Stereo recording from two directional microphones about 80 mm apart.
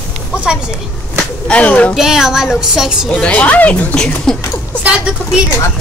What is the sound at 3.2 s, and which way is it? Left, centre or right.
Speech, centre.